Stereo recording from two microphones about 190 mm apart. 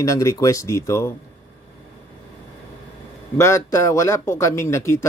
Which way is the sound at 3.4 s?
15° left (ahead or behind).